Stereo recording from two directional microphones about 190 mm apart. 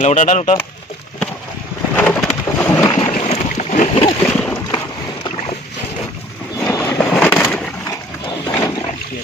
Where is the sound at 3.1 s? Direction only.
35° left (ahead or behind).